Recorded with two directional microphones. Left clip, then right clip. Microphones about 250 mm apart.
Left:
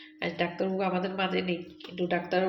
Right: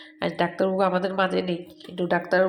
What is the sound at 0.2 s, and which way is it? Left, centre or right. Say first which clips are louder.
A woman's voice: right 6 dB; right.